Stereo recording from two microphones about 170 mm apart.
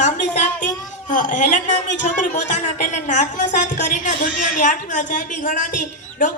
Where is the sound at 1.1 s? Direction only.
50° left (ahead or behind).